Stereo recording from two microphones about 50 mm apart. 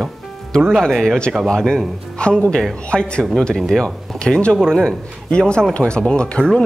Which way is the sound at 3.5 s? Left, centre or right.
Centre.